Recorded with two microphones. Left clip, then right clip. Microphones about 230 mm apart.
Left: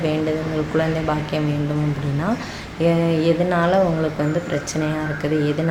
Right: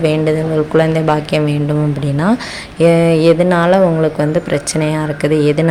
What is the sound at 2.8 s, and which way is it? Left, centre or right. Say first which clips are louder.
Speech: right 9 dB; right.